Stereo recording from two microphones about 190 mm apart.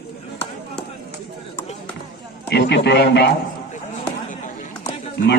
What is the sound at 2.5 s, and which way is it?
Speech, 60° left (ahead or behind).